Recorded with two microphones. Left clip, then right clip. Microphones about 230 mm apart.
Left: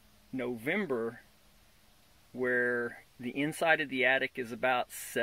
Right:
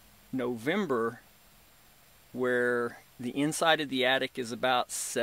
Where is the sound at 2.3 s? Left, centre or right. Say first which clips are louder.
Right 2 dB; right.